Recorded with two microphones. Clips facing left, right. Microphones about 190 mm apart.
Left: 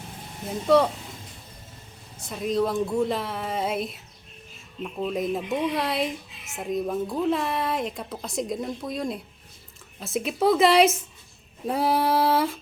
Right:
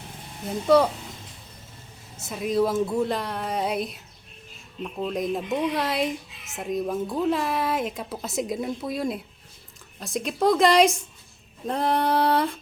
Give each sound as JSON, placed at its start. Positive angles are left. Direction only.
{"t": 0.7, "sound": "speech", "side_deg": 0}
{"t": 2.2, "sound": "speech", "side_deg": -5}